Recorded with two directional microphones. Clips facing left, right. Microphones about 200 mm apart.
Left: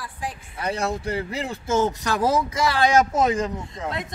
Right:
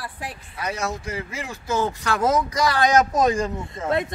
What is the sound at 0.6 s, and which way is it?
Speech, 30° left (ahead or behind).